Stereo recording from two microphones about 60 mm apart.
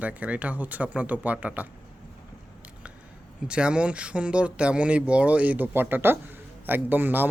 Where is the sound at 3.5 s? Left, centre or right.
Centre.